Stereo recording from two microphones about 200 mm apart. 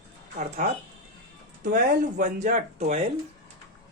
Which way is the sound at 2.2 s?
40° right (ahead or behind).